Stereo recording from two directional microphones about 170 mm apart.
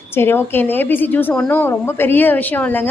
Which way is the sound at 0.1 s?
15° left (ahead or behind).